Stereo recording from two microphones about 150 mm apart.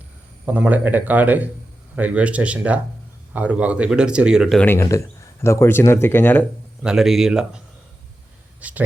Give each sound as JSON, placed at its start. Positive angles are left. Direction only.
{"t": 0.4, "sound": "speech", "side_deg": -10}
{"t": 4.6, "sound": "speech", "side_deg": 15}
{"t": 6.8, "sound": "speech", "side_deg": 0}
{"t": 8.6, "sound": "speech", "side_deg": -10}